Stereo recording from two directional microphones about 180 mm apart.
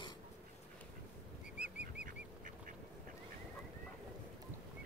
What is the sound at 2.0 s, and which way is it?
Duck, 50° right (ahead or behind).